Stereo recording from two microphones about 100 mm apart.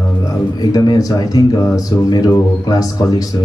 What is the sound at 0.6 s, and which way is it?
A man's voice, 45° left (ahead or behind).